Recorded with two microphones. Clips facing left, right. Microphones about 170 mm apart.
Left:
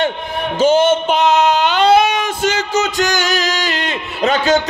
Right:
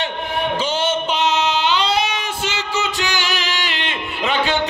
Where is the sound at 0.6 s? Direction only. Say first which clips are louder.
Left 14 dB; 45° left (ahead or behind).